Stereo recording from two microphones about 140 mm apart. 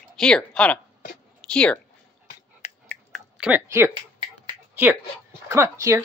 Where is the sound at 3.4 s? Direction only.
15° right (ahead or behind).